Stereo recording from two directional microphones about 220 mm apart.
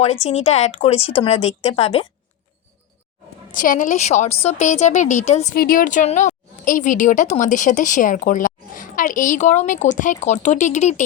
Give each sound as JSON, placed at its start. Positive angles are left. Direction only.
{"t": 0.0, "sound": "speech", "side_deg": 30}
{"t": 3.5, "sound": "a woman's voice", "side_deg": 35}